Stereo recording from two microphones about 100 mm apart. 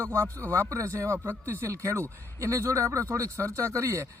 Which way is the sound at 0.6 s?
30° right (ahead or behind).